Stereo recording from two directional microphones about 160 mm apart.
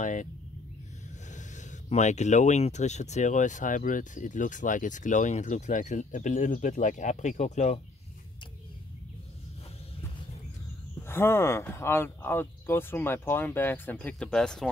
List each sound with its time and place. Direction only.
0.0 s speech: 50° left (ahead or behind)
1.3 s speech: 50° left (ahead or behind)
11.1 s speech: 15° left (ahead or behind)